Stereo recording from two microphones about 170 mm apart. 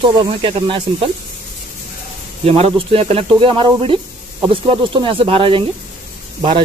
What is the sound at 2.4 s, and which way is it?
Speech, 35° right (ahead or behind).